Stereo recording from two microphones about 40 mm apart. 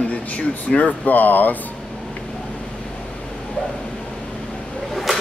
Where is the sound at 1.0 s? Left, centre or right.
Left.